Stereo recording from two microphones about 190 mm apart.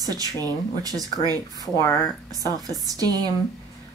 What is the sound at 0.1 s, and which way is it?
Speech, 20° right (ahead or behind).